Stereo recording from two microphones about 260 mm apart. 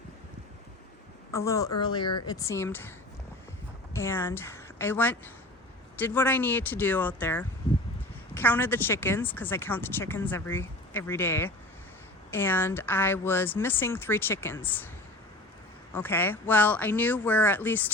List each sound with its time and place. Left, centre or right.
1.3 s a woman's voice: centre
3.9 s a woman's voice: centre
16.0 s a woman's voice: centre